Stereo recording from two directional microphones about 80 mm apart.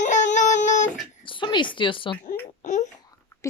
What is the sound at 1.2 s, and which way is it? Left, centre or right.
Speech, left.